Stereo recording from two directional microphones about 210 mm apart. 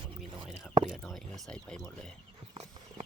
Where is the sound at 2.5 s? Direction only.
30° right (ahead or behind).